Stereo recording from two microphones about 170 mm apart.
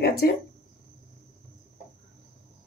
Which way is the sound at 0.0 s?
65° left (ahead or behind).